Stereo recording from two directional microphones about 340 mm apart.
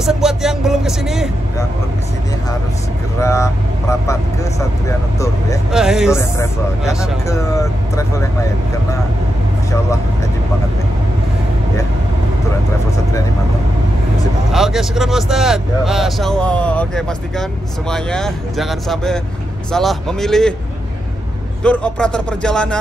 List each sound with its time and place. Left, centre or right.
0.0 s speech: centre
3.2 s speech: centre
5.7 s speech: centre
14.5 s speech: centre
21.6 s speech: centre